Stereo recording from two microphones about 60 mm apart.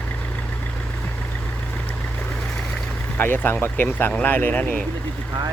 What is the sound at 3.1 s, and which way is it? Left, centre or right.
Speech, left.